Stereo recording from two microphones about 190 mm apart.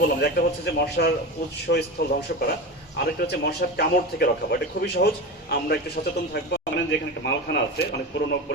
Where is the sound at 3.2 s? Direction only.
60° left (ahead or behind).